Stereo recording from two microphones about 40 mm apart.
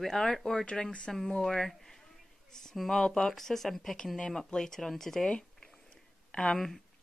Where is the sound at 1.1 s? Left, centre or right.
Centre.